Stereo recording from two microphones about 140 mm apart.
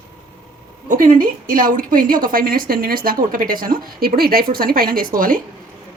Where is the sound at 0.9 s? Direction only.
75° right (ahead or behind).